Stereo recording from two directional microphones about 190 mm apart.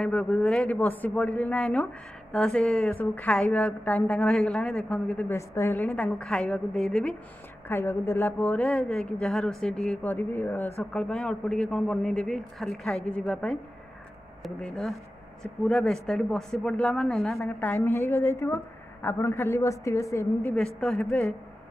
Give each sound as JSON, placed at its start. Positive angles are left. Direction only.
{"t": 0.0, "sound": "a woman's voice", "side_deg": 5}
{"t": 20.6, "sound": "a woman's voice", "side_deg": 0}